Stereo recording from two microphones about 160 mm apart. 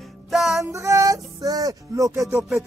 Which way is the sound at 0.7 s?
20° right (ahead or behind).